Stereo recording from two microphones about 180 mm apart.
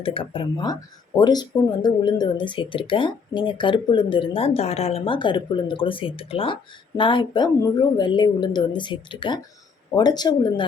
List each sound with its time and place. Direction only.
0.0 s speech: 30° left (ahead or behind)